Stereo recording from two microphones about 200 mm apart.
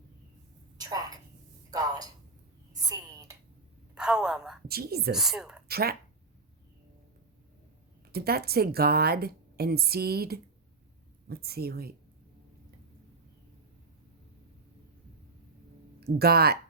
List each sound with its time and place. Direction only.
0.8 s a sound: 20° right (ahead or behind)
2.7 s whispering: 15° right (ahead or behind)
3.9 s speech: 5° right (ahead or behind)
4.7 s a woman's voice: 50° right (ahead or behind)
5.1 s speech: centre (ahead or behind)
5.6 s a woman's voice: 50° right (ahead or behind)
8.1 s a woman's voice: 50° right (ahead or behind)
16.0 s speech: 50° right (ahead or behind)